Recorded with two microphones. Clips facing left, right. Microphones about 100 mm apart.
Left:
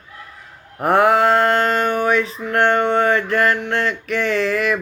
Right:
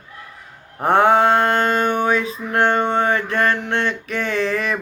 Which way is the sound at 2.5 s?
20° right (ahead or behind).